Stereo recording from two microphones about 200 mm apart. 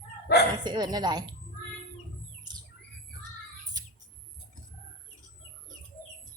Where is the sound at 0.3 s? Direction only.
55° left (ahead or behind).